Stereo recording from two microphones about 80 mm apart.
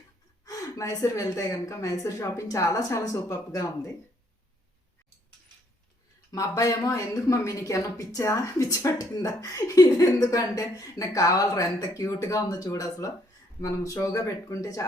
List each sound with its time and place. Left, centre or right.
0.4 s gasp: left
0.9 s a woman's voice: left
6.3 s a woman's voice: left